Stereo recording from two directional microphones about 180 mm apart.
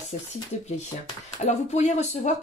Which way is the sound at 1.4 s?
40° left (ahead or behind).